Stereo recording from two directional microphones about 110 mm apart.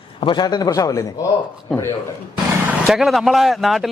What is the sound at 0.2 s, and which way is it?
Speech, 45° left (ahead or behind).